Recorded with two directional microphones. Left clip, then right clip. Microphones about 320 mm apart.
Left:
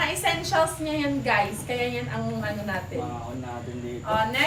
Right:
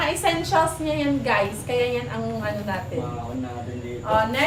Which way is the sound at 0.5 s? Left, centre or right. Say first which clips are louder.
Right 3 dB; centre.